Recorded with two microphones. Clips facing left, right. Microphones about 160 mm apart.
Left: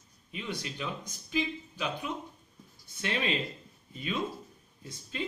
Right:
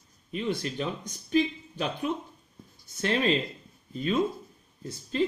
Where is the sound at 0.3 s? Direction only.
40° right (ahead or behind).